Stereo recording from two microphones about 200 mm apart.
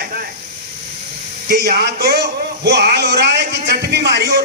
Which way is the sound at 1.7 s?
55° right (ahead or behind).